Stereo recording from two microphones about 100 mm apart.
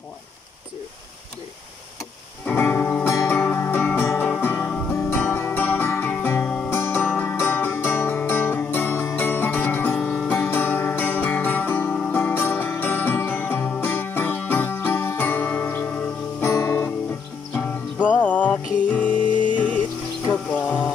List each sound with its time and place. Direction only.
2.4 s music: 20° left (ahead or behind)
17.5 s music: 15° left (ahead or behind)